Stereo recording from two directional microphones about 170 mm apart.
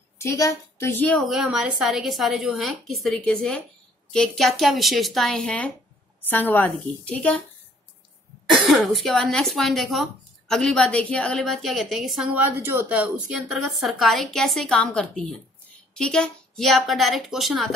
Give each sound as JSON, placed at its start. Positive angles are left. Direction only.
{"t": 0.2, "sound": "a woman's voice", "side_deg": 20}
{"t": 1.4, "sound": "a woman's voice", "side_deg": -5}
{"t": 8.5, "sound": "a woman's voice", "side_deg": 0}